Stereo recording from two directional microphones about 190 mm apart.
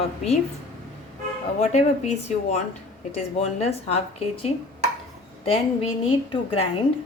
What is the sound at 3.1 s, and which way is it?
A woman's voice, 35° left (ahead or behind).